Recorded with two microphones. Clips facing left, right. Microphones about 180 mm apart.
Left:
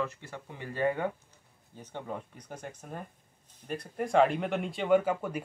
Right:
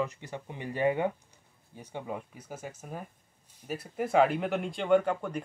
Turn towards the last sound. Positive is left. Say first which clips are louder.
# even
turn(degrees=5)  # may be behind; listen again after turning